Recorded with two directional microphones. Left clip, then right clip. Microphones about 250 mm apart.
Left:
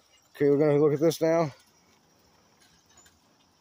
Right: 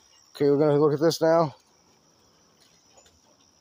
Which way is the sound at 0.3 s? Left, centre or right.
Centre.